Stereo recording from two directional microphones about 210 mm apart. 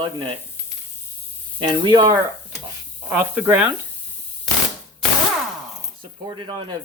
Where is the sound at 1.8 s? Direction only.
20° right (ahead or behind).